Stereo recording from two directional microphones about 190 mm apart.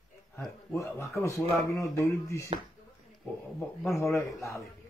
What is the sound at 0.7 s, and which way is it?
A man's voice, 15° left (ahead or behind).